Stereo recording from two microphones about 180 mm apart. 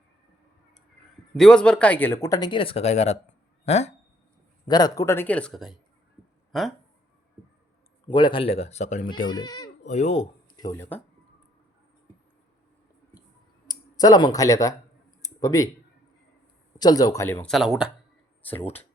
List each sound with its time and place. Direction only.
1.4 s speech: 5° left (ahead or behind); by 3.9 s 40° left (ahead or behind)
4.7 s speech: 20° left (ahead or behind); by 6.7 s centre (ahead or behind)
8.1 s speech: 25° left (ahead or behind); by 9.2 s 45° left (ahead or behind)
9.4 s speech: 20° left (ahead or behind)
9.8 s speech: 40° left (ahead or behind)
10.6 s speech: 15° left (ahead or behind)
13.7 s speech: 20° left (ahead or behind)
15.2 s a sound: 20° left (ahead or behind)
16.7 s speech: 20° left (ahead or behind)
17.4 s speech: centre (ahead or behind)